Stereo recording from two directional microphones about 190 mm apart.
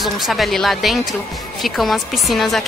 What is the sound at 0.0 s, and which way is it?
Speech, centre (ahead or behind).